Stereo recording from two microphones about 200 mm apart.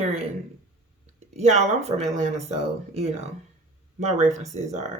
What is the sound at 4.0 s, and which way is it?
Speech, 35° right (ahead or behind).